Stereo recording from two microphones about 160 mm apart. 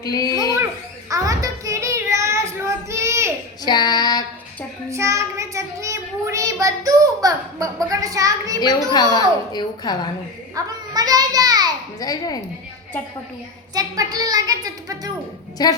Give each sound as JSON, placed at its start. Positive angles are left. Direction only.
{"t": 0.0, "sound": "speech", "side_deg": 25}
{"t": 1.1, "sound": "child singing", "side_deg": -20}
{"t": 3.6, "sound": "female singing", "side_deg": 25}
{"t": 4.9, "sound": "child singing", "side_deg": -20}
{"t": 8.6, "sound": "speech", "side_deg": 25}
{"t": 10.5, "sound": "a sound", "side_deg": -25}
{"t": 11.9, "sound": "speech", "side_deg": 25}
{"t": 13.7, "sound": "a woman's voice", "side_deg": -20}
{"t": 15.6, "sound": "speech", "side_deg": 25}